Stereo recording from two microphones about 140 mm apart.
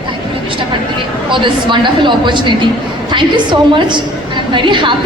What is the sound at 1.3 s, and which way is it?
A woman's voice, 35° right (ahead or behind).